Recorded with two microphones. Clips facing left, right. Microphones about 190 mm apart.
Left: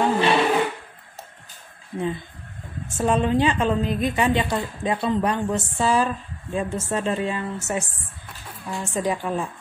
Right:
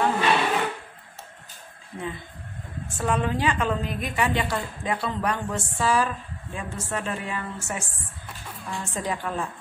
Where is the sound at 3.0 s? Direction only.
25° left (ahead or behind).